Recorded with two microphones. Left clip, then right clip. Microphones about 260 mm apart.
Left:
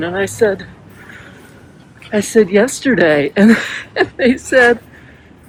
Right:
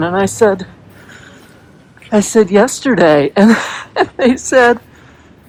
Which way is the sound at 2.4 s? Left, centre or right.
Centre.